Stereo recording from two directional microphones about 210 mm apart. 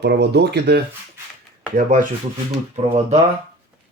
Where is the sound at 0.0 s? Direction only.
55° right (ahead or behind).